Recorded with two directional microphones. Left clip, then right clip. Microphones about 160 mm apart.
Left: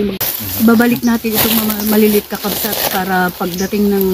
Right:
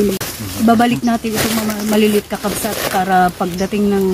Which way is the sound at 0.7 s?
35° right (ahead or behind).